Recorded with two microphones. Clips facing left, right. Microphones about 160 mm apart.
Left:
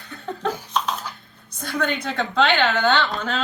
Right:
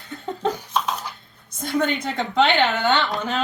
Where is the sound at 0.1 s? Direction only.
20° right (ahead or behind).